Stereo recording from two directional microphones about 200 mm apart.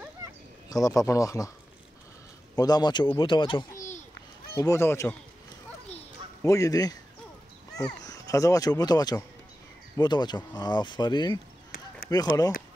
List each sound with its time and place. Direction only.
0.7 s speech: 15° left (ahead or behind)
2.5 s speech: 20° left (ahead or behind)
6.4 s speech: 15° left (ahead or behind)